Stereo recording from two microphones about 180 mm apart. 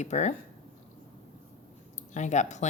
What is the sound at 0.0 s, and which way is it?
Speech, 40° left (ahead or behind).